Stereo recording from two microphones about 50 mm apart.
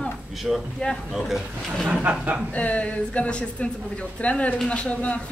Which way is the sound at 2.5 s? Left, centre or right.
Left.